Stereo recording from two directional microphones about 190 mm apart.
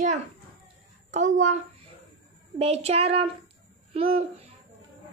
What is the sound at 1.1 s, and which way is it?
Speech, 40° right (ahead or behind).